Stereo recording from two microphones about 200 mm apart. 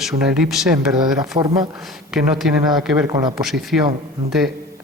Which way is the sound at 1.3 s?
30° right (ahead or behind).